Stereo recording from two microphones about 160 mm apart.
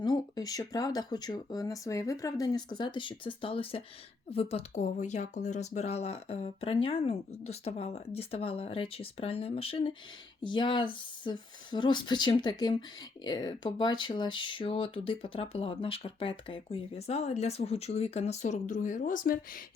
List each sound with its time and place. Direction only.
0.0 s speech: 25° left (ahead or behind); by 19.4 s 60° left (ahead or behind)